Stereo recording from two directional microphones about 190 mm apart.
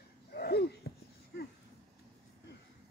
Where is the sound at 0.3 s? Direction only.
55° left (ahead or behind).